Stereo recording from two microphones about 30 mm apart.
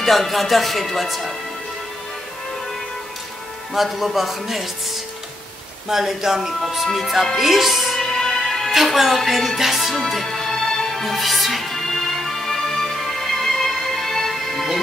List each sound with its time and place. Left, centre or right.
0.0 s speech: centre
3.7 s speech: centre
5.9 s speech: centre
6.6 s speech: centre
7.9 s music: centre
8.7 s speech: centre
9.6 s music: centre
11.1 s music: centre